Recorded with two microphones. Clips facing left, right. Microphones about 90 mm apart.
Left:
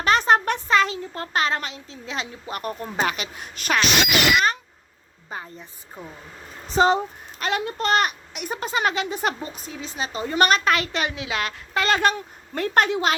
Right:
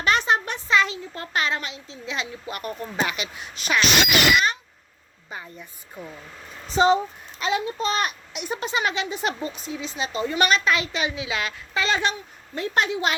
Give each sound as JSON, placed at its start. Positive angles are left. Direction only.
{"t": 0.0, "sound": "a child's voice", "side_deg": 40}
{"t": 5.3, "sound": "a woman's voice", "side_deg": 35}
{"t": 6.7, "sound": "a woman's voice", "side_deg": 45}
{"t": 8.4, "sound": "a woman's voice", "side_deg": 45}